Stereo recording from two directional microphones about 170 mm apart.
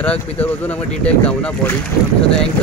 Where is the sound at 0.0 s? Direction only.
10° left (ahead or behind).